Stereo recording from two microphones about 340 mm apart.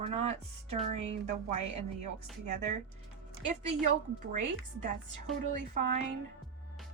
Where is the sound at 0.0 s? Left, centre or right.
Centre.